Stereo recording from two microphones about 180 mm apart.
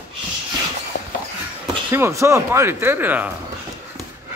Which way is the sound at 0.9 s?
55° left (ahead or behind).